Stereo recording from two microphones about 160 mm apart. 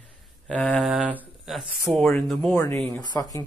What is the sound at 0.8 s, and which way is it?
Speech, 5° right (ahead or behind).